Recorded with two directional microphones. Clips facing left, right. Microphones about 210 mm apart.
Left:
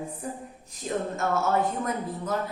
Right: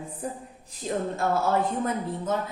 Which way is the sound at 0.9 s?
30° right (ahead or behind).